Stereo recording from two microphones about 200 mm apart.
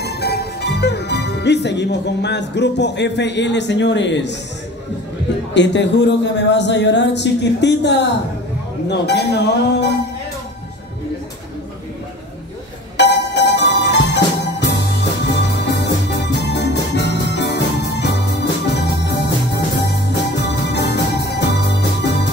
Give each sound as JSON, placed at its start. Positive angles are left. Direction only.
{"t": 0.0, "sound": "music", "side_deg": 55}
{"t": 5.5, "sound": "speech", "side_deg": 60}
{"t": 12.9, "sound": "music", "side_deg": 60}
{"t": 15.3, "sound": "music", "side_deg": 60}